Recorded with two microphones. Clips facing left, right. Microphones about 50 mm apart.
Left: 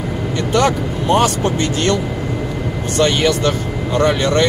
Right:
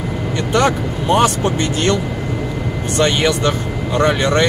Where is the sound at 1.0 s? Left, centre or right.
Right.